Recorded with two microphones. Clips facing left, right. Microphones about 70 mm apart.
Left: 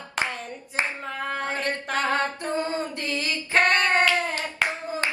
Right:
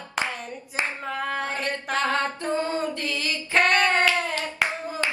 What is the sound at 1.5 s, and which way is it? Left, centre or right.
Singing, left.